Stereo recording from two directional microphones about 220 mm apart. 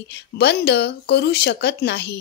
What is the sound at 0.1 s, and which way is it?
Speech, 50° left (ahead or behind).